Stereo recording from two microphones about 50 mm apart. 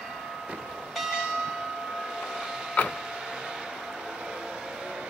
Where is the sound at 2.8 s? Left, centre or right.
Left.